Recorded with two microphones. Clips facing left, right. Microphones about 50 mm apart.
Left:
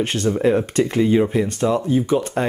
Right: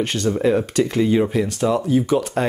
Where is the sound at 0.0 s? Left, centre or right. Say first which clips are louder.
Left 1 dB; centre.